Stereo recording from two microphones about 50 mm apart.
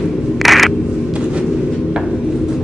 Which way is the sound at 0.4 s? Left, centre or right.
Centre.